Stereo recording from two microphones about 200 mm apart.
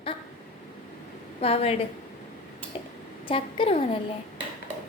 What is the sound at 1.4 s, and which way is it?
Speech, 30° left (ahead or behind).